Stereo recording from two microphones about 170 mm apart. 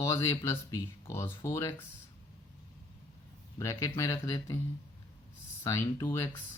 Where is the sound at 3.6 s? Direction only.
15° left (ahead or behind).